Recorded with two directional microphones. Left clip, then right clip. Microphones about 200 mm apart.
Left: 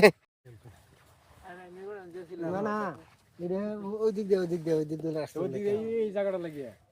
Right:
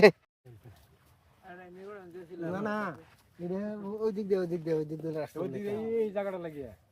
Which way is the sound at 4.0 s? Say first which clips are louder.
Left 3 dB; 35° left (ahead or behind).